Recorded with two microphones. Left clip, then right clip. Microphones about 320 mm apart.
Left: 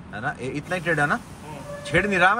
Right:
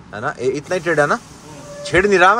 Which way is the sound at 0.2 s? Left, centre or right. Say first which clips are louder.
Right 9 dB; right.